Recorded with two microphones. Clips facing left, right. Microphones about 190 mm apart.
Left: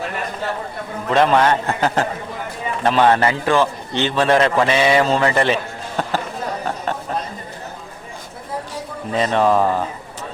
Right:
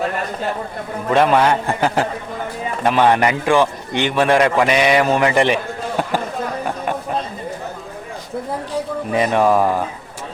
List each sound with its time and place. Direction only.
1.1 s a man's voice: 10° right (ahead or behind)
6.0 s a sound: 10° right (ahead or behind)
9.1 s a man's voice: 15° right (ahead or behind)